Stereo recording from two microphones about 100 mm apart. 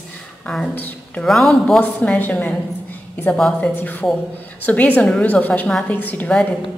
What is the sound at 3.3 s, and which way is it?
Speech, 5° left (ahead or behind).